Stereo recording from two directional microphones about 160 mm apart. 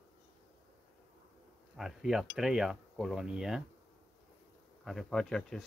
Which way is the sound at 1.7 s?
Centre (ahead or behind).